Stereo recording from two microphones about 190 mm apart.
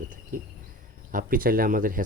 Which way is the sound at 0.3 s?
45° right (ahead or behind).